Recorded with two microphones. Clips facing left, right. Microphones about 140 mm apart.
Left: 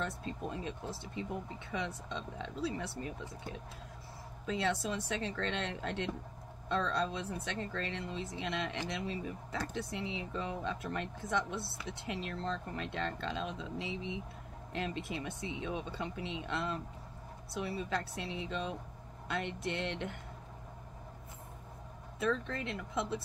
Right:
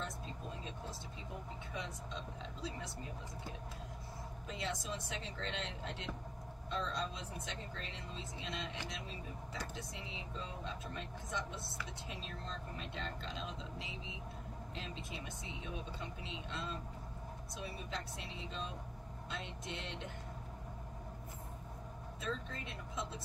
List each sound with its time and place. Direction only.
0.0 s speech: 70° left (ahead or behind)
4.5 s speech: 75° left (ahead or behind)
22.2 s speech: 75° left (ahead or behind)